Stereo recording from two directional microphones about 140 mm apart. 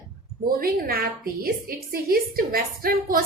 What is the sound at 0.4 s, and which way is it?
A woman's voice, 90° right.